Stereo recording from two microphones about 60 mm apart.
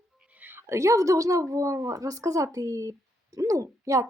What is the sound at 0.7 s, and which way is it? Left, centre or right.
A woman's voice, right.